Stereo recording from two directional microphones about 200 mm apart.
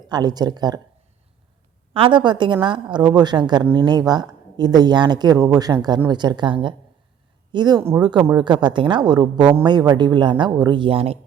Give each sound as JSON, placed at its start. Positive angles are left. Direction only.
{"t": 0.1, "sound": "speech", "side_deg": -20}
{"t": 1.9, "sound": "speech", "side_deg": -25}